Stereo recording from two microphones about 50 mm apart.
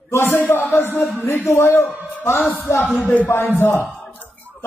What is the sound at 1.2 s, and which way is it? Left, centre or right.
Speech, left.